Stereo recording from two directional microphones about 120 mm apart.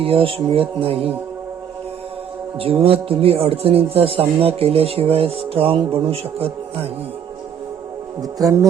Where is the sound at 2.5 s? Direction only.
50° right (ahead or behind).